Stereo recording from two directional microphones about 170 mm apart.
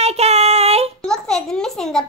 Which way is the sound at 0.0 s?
40° right (ahead or behind).